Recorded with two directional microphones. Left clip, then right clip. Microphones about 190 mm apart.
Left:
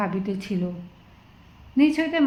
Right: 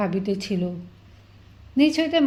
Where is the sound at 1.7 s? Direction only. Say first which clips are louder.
Right 1 dB; 40° right (ahead or behind).